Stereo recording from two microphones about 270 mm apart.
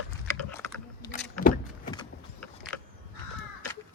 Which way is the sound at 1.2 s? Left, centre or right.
Left.